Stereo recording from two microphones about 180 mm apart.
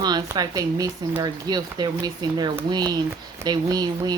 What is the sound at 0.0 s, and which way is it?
A woman's voice, 20° right (ahead or behind).